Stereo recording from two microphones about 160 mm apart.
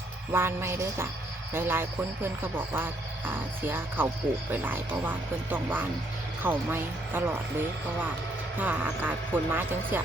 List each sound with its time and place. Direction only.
0.3 s speech: 15° right (ahead or behind)
8.5 s speech: 10° right (ahead or behind)